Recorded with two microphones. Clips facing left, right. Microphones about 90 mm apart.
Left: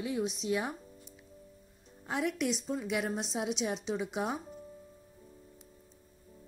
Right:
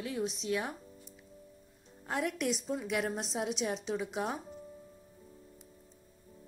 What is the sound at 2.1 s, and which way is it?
A woman's voice, centre (ahead or behind).